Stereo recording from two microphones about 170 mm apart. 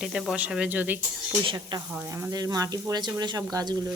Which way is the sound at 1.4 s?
25° right (ahead or behind).